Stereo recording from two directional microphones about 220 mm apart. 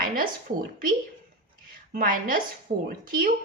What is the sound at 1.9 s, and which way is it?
Speech, 40° right (ahead or behind).